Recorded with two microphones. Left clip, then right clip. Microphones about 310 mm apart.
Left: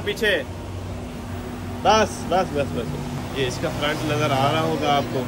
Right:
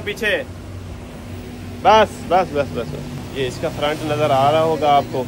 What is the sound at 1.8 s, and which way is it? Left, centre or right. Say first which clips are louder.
Speech: right 5 dB; right.